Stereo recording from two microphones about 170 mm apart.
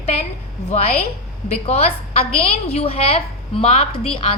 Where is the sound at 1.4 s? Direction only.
35° left (ahead or behind).